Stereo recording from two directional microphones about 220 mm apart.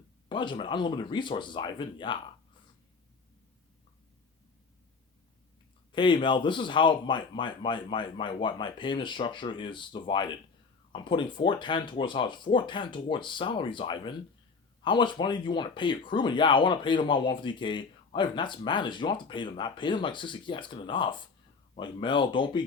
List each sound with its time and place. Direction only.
0.3 s speech: 20° left (ahead or behind)
5.9 s speech: 20° left (ahead or behind)